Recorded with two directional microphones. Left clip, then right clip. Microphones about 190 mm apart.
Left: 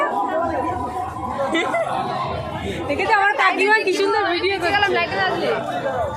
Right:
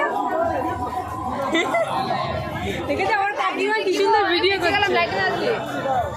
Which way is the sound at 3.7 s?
Centre (ahead or behind).